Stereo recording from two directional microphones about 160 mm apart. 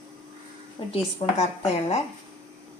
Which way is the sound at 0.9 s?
40° left (ahead or behind).